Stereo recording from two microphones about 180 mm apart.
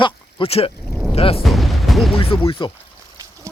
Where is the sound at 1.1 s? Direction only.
30° left (ahead or behind).